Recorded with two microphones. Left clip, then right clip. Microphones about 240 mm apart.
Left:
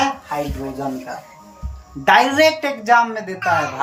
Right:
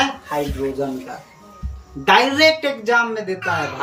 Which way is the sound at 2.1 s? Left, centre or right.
Centre.